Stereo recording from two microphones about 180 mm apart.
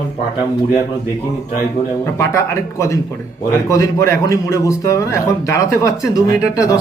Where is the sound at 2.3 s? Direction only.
15° left (ahead or behind).